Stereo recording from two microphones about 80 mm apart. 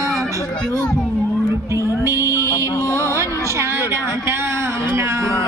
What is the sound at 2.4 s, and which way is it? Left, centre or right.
Music, left.